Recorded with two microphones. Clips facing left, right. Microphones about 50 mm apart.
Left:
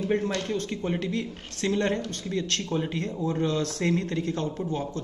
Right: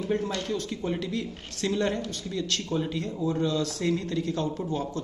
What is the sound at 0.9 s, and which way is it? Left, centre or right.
Speech, left.